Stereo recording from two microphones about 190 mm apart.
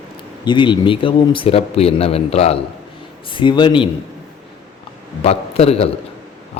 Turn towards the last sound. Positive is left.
turn(degrees=30)  # may be behind; listen again after turning